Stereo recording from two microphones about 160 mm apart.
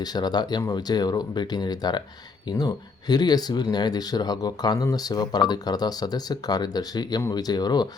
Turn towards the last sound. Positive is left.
turn(degrees=25)  # may be behind; listen again after turning